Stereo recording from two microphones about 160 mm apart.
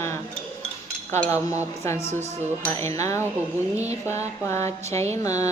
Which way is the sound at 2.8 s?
20° left (ahead or behind).